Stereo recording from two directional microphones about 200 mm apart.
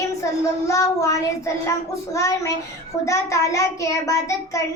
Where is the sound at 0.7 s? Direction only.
15° left (ahead or behind).